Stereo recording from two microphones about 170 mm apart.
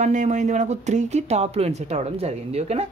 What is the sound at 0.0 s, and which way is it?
Speech, 45° right (ahead or behind).